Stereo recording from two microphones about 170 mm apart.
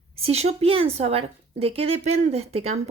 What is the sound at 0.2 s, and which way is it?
A woman's voice, 35° right (ahead or behind).